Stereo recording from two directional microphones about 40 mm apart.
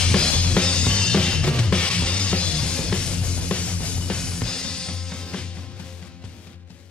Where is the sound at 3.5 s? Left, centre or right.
Left.